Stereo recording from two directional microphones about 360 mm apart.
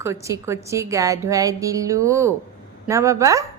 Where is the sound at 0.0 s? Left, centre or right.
Centre.